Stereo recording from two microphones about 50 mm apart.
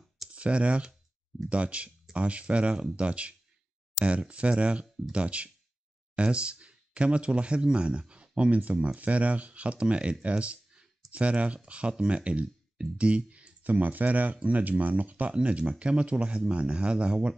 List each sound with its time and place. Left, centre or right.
0.3 s speech: right